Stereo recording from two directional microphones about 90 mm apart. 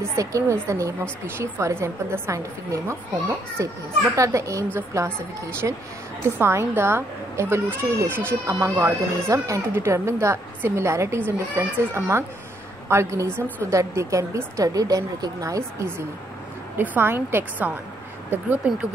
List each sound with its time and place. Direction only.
0.1 s speech: 35° right (ahead or behind)
16.7 s speech: 20° right (ahead or behind)